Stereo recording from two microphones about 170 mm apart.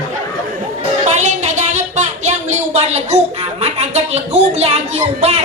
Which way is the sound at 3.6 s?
40° right (ahead or behind).